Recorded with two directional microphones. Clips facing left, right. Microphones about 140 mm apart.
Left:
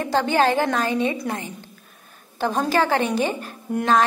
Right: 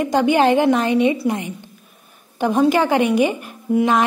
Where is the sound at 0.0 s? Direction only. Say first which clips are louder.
Right 4 dB; 15° right (ahead or behind).